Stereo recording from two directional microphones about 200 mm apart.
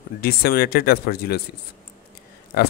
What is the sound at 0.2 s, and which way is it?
Speech, 50° left (ahead or behind).